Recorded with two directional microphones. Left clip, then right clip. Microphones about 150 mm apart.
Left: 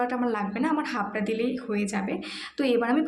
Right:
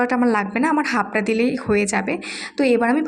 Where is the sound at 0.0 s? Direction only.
45° right (ahead or behind).